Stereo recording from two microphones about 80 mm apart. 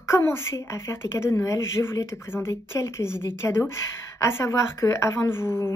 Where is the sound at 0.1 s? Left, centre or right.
Left.